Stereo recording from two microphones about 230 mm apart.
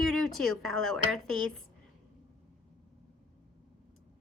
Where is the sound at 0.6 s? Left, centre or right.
Right.